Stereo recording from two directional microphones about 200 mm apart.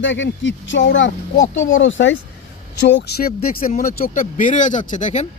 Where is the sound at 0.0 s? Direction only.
70° left (ahead or behind).